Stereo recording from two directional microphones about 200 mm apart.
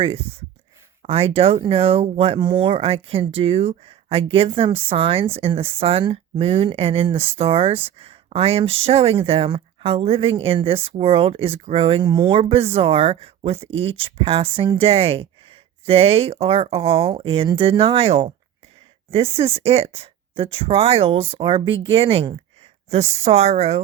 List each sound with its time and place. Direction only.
1.0 s speech: 30° right (ahead or behind)